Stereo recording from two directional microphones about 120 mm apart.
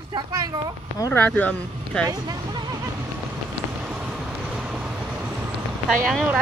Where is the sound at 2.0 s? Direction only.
30° right (ahead or behind).